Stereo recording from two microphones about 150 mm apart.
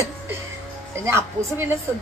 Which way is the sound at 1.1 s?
15° right (ahead or behind).